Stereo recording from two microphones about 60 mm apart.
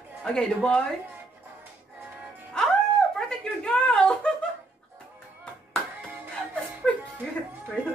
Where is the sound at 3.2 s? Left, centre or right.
Centre.